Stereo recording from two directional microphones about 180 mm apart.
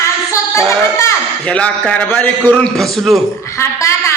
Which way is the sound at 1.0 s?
10° left (ahead or behind).